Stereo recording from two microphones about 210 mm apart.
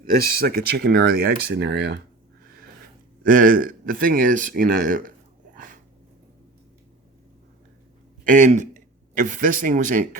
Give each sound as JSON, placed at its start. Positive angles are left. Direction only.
{"t": 0.0, "sound": "speech", "side_deg": -45}
{"t": 3.2, "sound": "a man's voice", "side_deg": -40}
{"t": 5.5, "sound": "a sound", "side_deg": -40}
{"t": 8.2, "sound": "a man's voice", "side_deg": -35}